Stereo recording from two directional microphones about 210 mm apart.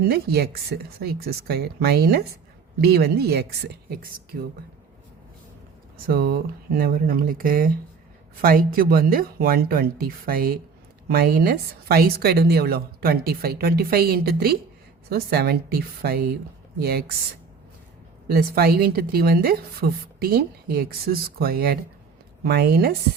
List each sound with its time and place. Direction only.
0.1 s a woman's voice: 50° right (ahead or behind)
6.1 s a woman's voice: 45° right (ahead or behind)
18.3 s a woman's voice: 45° right (ahead or behind)